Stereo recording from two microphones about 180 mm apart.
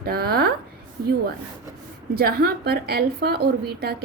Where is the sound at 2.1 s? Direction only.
60° right (ahead or behind).